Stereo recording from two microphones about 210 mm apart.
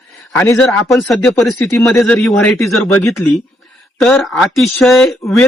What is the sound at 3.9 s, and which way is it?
Speech, centre (ahead or behind).